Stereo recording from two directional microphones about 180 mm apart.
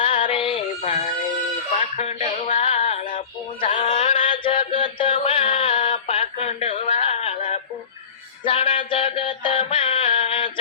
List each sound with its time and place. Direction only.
0.0 s music: 30° left (ahead or behind)
1.8 s a sound: 35° left (ahead or behind)
3.7 s music: 35° left (ahead or behind)